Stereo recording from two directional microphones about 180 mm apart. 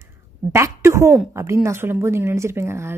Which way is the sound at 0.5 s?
15° right (ahead or behind).